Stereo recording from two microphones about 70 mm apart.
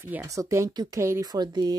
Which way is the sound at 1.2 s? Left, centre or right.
Right.